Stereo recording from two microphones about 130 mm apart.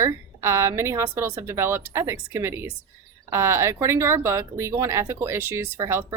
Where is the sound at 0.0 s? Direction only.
20° right (ahead or behind).